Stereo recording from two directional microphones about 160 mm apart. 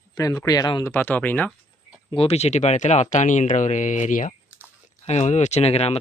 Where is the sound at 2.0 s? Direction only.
40° left (ahead or behind).